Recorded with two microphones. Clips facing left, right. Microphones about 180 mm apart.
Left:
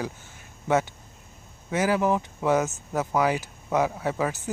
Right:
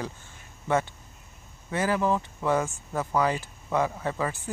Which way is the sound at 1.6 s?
10° left (ahead or behind).